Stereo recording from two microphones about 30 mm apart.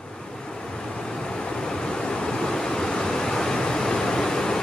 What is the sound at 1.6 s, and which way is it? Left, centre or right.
Waves, left.